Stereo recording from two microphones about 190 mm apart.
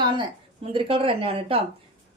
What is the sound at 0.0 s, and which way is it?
Speech, 25° right (ahead or behind).